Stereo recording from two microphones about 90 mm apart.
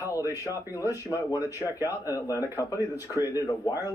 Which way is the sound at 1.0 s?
40° left (ahead or behind).